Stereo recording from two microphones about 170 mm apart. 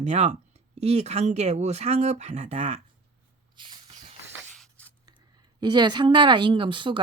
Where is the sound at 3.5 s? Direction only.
30° right (ahead or behind).